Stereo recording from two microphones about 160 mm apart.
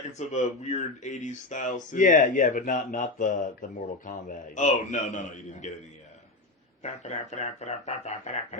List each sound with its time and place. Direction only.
0.3 s speech: 45° left (ahead or behind)
6.8 s speech: 45° left (ahead or behind)